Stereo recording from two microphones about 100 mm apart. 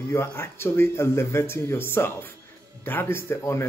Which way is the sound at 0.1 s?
25° left (ahead or behind).